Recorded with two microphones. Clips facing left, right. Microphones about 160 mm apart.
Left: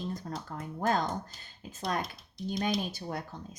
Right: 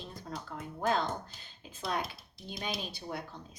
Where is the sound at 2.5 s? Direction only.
45° left (ahead or behind).